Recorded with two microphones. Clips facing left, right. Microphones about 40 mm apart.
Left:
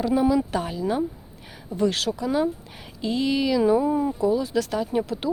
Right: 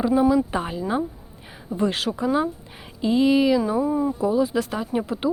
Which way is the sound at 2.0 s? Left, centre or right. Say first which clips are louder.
Right 2 dB; right.